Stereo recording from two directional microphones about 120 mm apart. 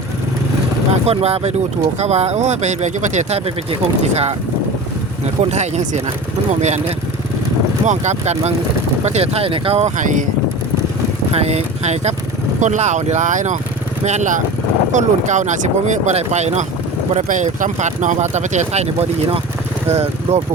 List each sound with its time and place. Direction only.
1.0 s speech: 60° right (ahead or behind); by 10.2 s 90° right
11.3 s speech: 60° right (ahead or behind)
12.5 s speech: 80° right
17.2 s speech: 90° right; by 20.4 s 65° right (ahead or behind)